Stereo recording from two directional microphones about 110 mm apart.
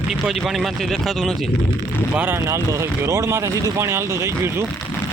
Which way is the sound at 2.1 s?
20° right (ahead or behind).